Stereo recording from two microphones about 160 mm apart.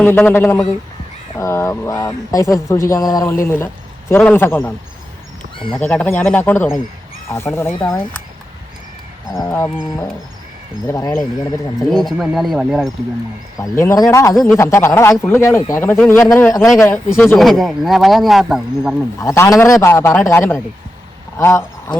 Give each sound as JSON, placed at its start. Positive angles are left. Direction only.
{"t": 0.0, "sound": "a man's voice", "side_deg": 10}
{"t": 5.5, "sound": "speech", "side_deg": 30}
{"t": 5.8, "sound": "a man's voice", "side_deg": 10}
{"t": 9.4, "sound": "speech", "side_deg": 20}
{"t": 10.8, "sound": "speech", "side_deg": 20}
{"t": 11.9, "sound": "speech", "side_deg": 0}
{"t": 13.6, "sound": "a man's voice", "side_deg": 20}
{"t": 17.3, "sound": "speech", "side_deg": 0}
{"t": 19.2, "sound": "a man's voice", "side_deg": 20}